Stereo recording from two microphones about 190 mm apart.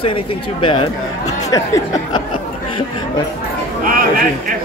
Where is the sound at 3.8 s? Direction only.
50° right (ahead or behind).